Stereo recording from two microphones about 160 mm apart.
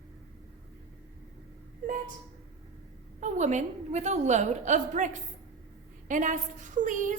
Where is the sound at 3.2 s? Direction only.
45° right (ahead or behind).